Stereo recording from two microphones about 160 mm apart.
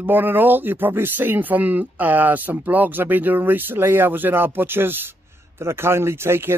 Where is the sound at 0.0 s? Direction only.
10° right (ahead or behind).